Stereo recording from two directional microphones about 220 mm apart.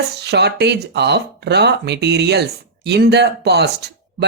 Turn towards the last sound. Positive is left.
turn(degrees=-50)  # may be behind; listen again after turning